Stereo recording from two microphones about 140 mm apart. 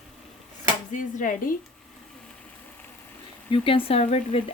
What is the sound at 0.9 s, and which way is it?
Speech, 70° left (ahead or behind).